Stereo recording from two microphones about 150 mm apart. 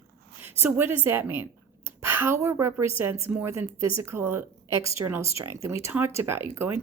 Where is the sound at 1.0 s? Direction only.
15° right (ahead or behind).